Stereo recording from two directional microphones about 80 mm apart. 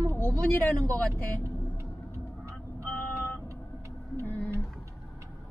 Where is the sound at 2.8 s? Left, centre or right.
Left.